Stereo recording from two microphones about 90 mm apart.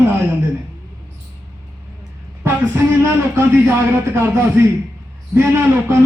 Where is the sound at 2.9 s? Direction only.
25° right (ahead or behind).